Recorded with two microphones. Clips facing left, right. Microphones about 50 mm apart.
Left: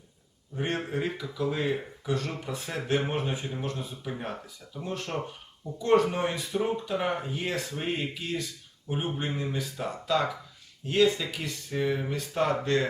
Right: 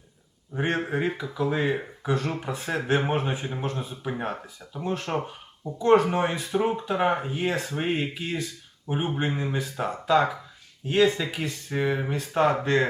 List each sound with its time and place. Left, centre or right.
0.6 s speech: right